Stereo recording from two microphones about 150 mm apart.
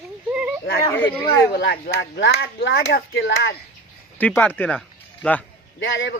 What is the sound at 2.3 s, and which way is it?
Speech, 90° left.